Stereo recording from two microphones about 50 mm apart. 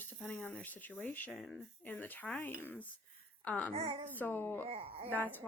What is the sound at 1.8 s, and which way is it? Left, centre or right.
A child's voice, left.